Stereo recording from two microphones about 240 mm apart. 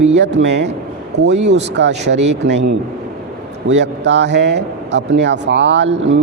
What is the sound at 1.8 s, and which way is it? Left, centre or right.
Speech, right.